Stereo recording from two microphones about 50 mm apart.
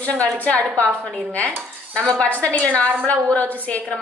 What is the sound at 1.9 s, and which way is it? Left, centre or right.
A woman's voice, centre.